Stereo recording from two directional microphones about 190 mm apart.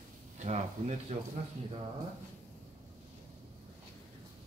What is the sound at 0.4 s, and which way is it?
Speech, 35° right (ahead or behind).